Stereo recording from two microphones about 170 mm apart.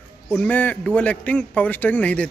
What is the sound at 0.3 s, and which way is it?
Speech, 5° left (ahead or behind).